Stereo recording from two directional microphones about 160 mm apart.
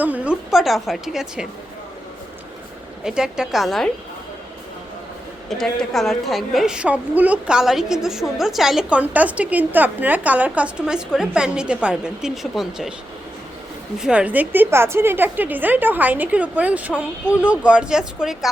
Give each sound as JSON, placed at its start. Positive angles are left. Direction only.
{"t": 0.0, "sound": "a woman's voice", "side_deg": -10}
{"t": 3.0, "sound": "a woman's voice", "side_deg": -5}
{"t": 5.5, "sound": "a woman's voice", "side_deg": 0}
{"t": 14.0, "sound": "a woman's voice", "side_deg": -5}